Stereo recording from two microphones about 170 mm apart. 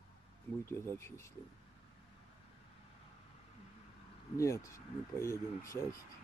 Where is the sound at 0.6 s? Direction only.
15° left (ahead or behind).